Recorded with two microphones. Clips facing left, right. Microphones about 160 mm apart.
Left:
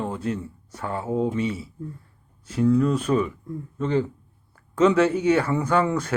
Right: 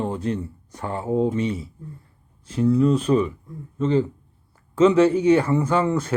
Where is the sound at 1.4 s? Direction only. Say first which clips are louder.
Right 2 dB; 40° right (ahead or behind).